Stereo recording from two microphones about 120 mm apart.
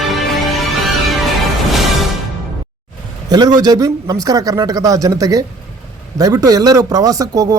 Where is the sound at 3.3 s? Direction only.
35° right (ahead or behind).